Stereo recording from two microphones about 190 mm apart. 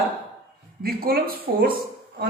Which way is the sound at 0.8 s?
50° right (ahead or behind).